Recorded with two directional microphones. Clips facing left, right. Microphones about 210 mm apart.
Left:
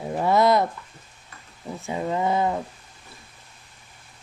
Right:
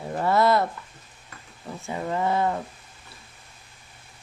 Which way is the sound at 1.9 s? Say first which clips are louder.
Left 2 dB; 15° left (ahead or behind).